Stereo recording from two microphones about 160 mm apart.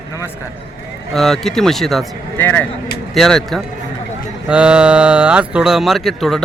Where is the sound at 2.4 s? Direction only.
10° left (ahead or behind).